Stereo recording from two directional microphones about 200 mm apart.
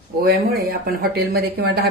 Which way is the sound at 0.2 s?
50° right (ahead or behind).